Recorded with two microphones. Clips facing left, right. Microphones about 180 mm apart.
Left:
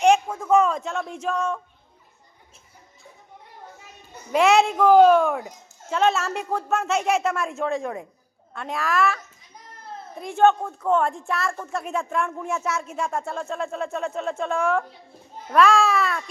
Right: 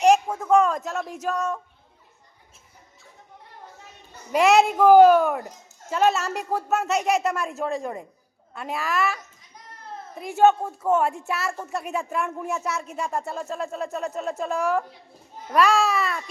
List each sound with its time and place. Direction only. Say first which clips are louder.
0.0 s a sound: even; 5° right (ahead or behind)
4.3 s speech: even; centre (ahead or behind)
10.2 s speech: even; 5° right (ahead or behind)